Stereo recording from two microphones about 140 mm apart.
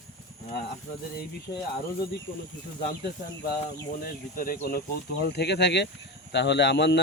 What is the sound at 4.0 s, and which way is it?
Speech, 90° left.